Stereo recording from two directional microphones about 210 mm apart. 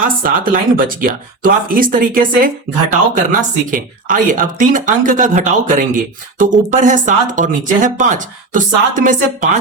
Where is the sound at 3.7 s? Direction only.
40° right (ahead or behind).